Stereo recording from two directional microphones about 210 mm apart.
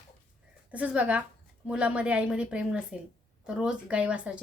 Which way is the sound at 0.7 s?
5° right (ahead or behind).